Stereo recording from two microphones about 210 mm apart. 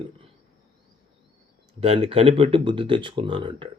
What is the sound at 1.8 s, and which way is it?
Speech, 25° right (ahead or behind).